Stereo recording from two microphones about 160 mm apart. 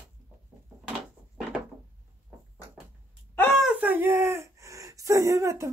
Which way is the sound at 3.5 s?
5° right (ahead or behind).